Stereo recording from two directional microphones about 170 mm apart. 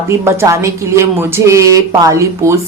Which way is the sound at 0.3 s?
15° right (ahead or behind).